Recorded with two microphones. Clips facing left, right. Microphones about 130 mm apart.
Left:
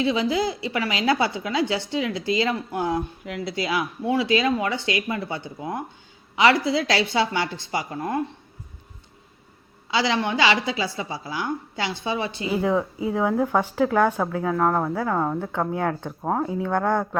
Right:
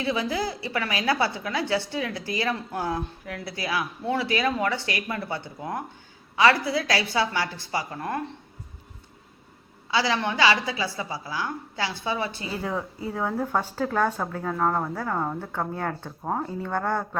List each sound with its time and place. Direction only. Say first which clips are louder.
0.0 s a woman's voice: left 4 dB; 15° left (ahead or behind)
9.9 s a woman's voice: left 2 dB; 25° left (ahead or behind)
16.6 s speech: left 4 dB; 10° left (ahead or behind)